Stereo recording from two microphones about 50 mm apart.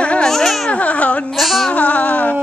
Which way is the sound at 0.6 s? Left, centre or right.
Left.